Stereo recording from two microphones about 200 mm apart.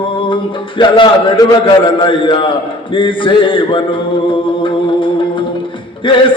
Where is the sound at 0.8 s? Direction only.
25° left (ahead or behind).